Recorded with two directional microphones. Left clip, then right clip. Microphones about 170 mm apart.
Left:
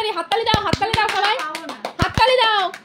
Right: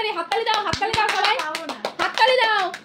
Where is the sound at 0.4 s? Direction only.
35° left (ahead or behind).